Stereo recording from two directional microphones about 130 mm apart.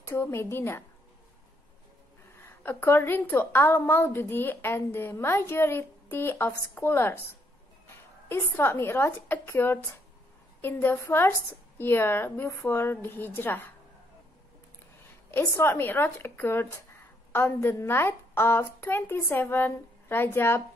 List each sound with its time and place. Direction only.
0.0 s a woman's voice: 20° left (ahead or behind)
2.3 s a woman's voice: 15° left (ahead or behind)
8.3 s a woman's voice: 20° left (ahead or behind)
15.3 s a woman's voice: 20° left (ahead or behind)